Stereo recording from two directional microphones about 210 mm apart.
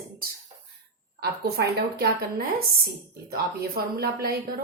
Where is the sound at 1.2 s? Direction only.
50° right (ahead or behind).